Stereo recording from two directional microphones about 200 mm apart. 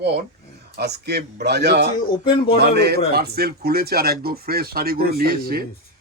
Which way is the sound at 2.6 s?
55° right (ahead or behind).